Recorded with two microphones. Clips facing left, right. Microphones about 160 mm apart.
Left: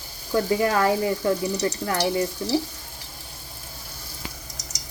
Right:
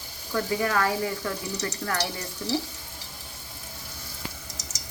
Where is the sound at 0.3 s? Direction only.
25° left (ahead or behind).